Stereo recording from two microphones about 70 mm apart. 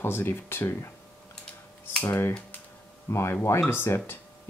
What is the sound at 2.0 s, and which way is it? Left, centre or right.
Speech, left.